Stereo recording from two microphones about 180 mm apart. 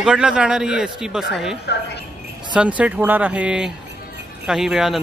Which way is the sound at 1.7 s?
70° left (ahead or behind).